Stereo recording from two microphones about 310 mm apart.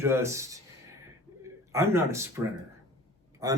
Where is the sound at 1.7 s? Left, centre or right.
Centre.